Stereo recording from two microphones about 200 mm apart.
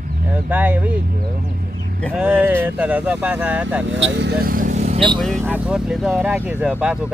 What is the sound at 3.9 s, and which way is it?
Speech, 65° right (ahead or behind).